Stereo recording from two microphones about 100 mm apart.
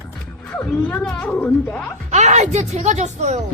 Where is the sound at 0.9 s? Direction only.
5° left (ahead or behind).